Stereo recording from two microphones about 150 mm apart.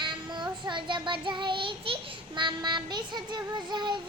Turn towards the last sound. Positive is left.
turn(degrees=-30)  # may be behind; listen again after turning